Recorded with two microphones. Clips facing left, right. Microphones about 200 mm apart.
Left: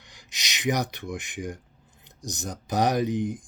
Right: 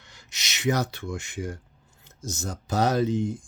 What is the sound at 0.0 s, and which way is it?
Speech, 15° left (ahead or behind).